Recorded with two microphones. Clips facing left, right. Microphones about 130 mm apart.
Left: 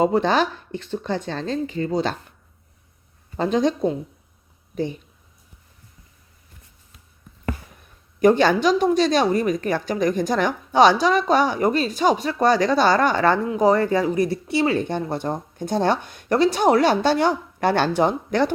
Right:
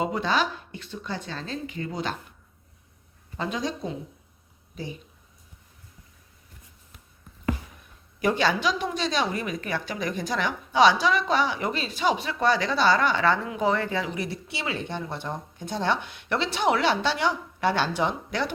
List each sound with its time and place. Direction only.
0.0 s a woman's voice: 40° left (ahead or behind)
3.3 s a woman's voice: 40° left (ahead or behind)
8.2 s a woman's voice: 50° left (ahead or behind)